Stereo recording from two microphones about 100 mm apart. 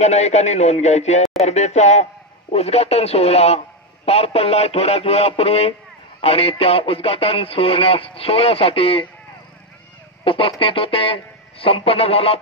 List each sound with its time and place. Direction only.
0.0 s a man's voice: 90° left
2.5 s a man's voice: 90° left; by 9.0 s 70° left (ahead or behind)
10.2 s speech: 65° left (ahead or behind)